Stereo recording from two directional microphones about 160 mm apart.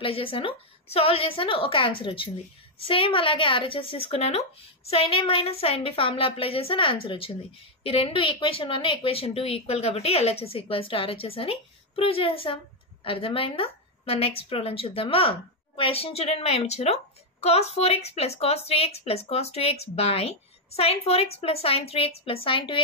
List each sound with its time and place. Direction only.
0.0 s a woman's voice: 35° left (ahead or behind)